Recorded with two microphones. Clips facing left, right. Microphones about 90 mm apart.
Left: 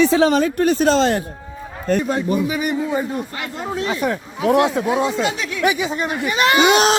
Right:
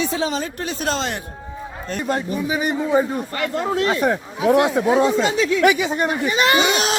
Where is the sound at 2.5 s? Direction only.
30° right (ahead or behind).